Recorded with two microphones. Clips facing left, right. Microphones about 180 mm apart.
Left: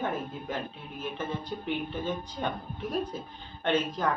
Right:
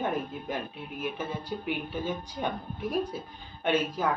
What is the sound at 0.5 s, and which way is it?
Speech, 10° right (ahead or behind).